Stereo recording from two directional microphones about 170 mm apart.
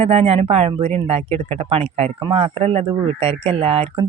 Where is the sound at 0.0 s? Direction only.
35° right (ahead or behind).